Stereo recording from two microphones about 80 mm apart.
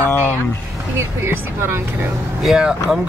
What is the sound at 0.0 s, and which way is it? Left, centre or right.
Speech, left.